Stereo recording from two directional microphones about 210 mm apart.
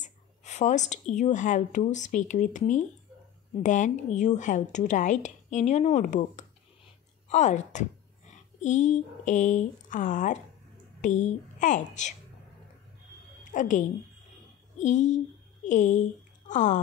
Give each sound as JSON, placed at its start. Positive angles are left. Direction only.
{"t": 0.0, "sound": "speech", "side_deg": 35}
{"t": 13.5, "sound": "a woman's voice", "side_deg": 35}